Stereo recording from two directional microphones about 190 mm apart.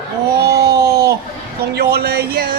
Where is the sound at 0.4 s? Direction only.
55° right (ahead or behind).